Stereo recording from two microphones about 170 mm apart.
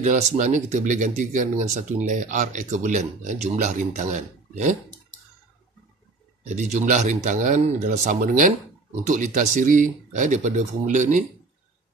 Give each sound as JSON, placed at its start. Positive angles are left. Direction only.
{"t": 0.0, "sound": "speech", "side_deg": -45}
{"t": 6.4, "sound": "speech", "side_deg": -45}